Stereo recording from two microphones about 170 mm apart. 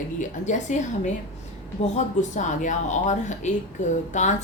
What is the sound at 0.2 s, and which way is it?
A woman's voice, 45° left (ahead or behind).